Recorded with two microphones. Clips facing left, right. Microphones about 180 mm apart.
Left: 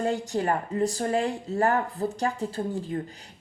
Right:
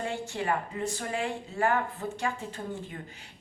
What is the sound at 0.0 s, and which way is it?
Speech, 40° left (ahead or behind).